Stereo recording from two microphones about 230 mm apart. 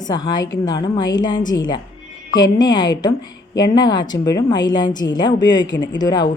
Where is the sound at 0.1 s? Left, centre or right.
Centre.